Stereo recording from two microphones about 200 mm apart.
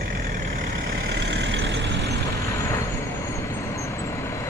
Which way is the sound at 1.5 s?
65° right (ahead or behind).